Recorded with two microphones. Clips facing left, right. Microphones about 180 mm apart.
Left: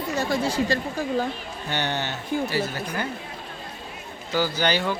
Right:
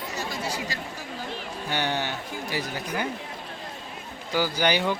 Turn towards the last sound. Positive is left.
turn(degrees=-15)  # may be behind; listen again after turning